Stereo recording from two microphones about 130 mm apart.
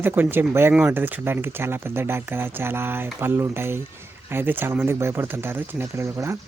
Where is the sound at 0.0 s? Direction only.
15° right (ahead or behind).